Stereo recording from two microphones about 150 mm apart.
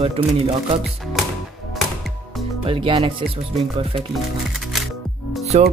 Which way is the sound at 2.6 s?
35° right (ahead or behind).